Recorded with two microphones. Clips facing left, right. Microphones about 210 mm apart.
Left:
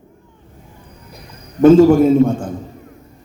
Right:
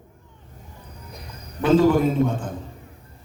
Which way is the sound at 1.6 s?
45° left (ahead or behind).